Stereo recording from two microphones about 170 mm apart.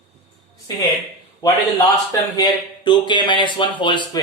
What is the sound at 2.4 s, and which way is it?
Speech, 25° left (ahead or behind).